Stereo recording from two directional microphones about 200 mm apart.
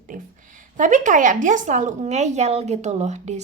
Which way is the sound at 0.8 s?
40° right (ahead or behind).